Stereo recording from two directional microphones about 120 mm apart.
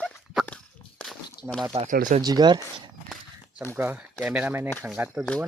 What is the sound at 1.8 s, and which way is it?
Speech, 80° right.